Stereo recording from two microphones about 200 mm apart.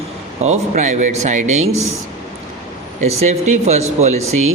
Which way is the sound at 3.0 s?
35° right (ahead or behind).